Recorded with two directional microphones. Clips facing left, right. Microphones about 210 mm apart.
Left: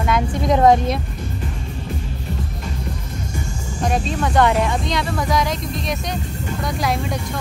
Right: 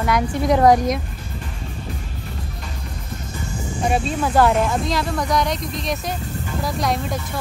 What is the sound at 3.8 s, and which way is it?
Speech, 5° right (ahead or behind).